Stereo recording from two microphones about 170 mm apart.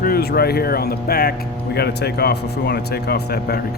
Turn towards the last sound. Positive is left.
turn(degrees=70)  # may be behind; listen again after turning